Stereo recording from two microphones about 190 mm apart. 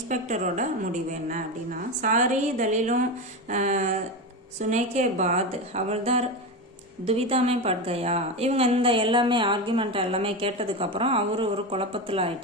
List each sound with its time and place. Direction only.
0.1 s a woman's voice: 40° right (ahead or behind)